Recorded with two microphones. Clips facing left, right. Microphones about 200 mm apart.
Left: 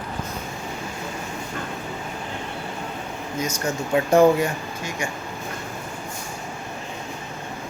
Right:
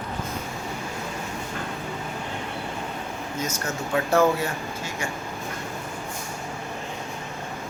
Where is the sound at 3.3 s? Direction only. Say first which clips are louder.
Left 4 dB; 10° left (ahead or behind).